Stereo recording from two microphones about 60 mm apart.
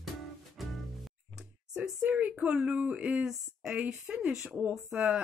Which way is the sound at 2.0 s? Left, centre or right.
Right.